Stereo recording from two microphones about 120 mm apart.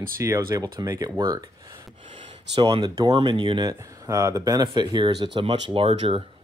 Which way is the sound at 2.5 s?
45° right (ahead or behind).